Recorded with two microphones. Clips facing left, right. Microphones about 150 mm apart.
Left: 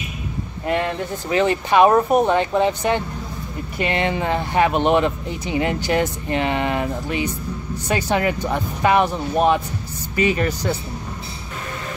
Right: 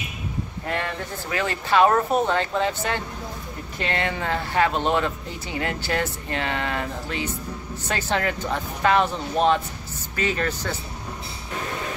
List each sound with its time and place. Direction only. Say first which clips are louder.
0.7 s speech: left 7 dB; 15° left (ahead or behind)